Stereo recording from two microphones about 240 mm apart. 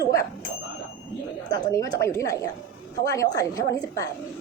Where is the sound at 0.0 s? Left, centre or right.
Centre.